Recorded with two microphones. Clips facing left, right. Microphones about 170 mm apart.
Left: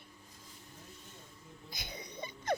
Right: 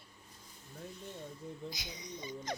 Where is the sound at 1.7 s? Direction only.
55° left (ahead or behind).